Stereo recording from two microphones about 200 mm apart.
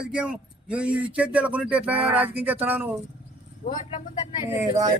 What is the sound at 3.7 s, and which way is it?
Speech, 25° left (ahead or behind).